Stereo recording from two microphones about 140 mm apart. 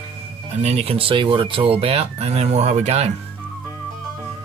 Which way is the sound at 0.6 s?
50° right (ahead or behind).